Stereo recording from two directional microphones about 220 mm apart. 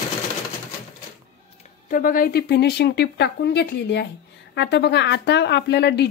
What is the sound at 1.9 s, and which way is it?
A woman's voice, 40° left (ahead or behind).